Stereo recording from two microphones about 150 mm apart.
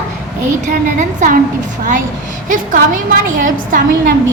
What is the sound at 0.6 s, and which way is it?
Speech, 55° right (ahead or behind).